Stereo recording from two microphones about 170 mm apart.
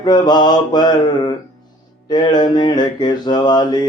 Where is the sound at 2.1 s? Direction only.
25° left (ahead or behind).